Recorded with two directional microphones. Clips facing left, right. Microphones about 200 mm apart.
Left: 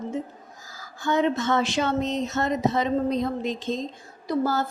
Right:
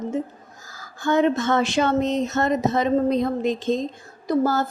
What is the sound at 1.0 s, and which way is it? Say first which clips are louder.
A woman's voice: right 4 dB; 50° right (ahead or behind).